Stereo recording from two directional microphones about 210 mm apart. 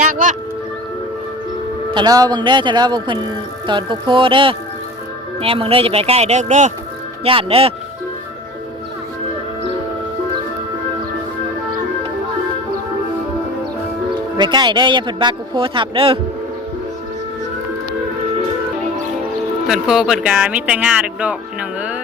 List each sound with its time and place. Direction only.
1.9 s a man's voice: 20° right (ahead or behind)
14.3 s a man's voice: 20° right (ahead or behind)
19.6 s speech: centre (ahead or behind)